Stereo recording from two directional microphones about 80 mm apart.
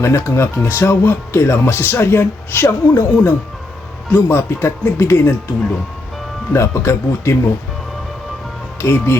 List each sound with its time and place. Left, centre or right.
0.0 s speech: left
6.5 s speech: left
8.8 s speech: left